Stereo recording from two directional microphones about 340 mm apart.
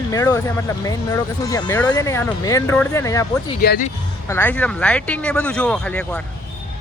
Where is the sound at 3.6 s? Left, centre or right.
Left.